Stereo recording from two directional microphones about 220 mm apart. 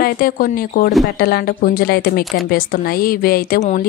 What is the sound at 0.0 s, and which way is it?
A woman's voice, 40° left (ahead or behind).